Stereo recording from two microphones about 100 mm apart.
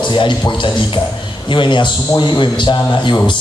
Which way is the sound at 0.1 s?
50° left (ahead or behind).